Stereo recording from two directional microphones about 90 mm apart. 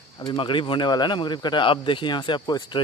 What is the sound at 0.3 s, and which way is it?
Speech, 65° left (ahead or behind).